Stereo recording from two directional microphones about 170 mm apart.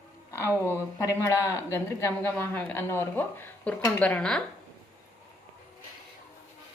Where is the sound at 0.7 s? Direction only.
15° left (ahead or behind).